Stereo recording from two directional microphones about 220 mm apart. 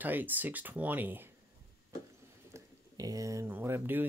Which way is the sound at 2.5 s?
15° right (ahead or behind).